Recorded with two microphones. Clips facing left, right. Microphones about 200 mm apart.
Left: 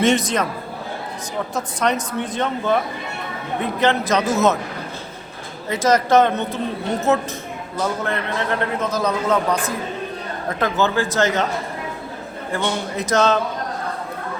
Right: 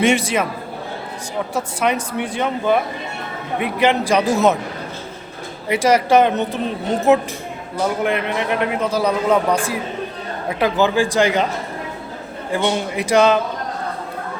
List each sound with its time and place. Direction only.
0.0 s a man's voice: 10° right (ahead or behind)
1.5 s a man's voice: 10° right (ahead or behind)
5.6 s a man's voice: 10° right (ahead or behind)
12.5 s a man's voice: 10° right (ahead or behind)